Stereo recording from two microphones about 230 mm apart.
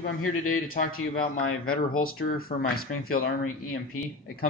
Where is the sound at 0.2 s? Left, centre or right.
Left.